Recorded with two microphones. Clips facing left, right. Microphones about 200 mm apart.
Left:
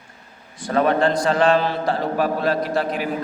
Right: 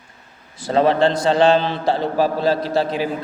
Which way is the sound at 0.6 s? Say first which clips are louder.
Right 2 dB; 30° right (ahead or behind).